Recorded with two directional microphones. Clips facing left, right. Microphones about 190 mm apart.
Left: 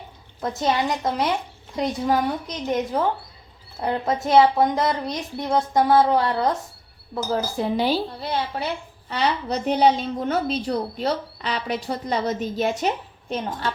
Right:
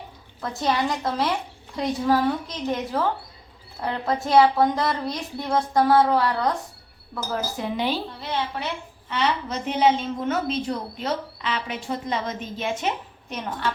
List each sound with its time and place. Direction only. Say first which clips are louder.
0.4 s a woman's voice: left 2 dB; 20° left (ahead or behind); by 12.9 s 40° left (ahead or behind)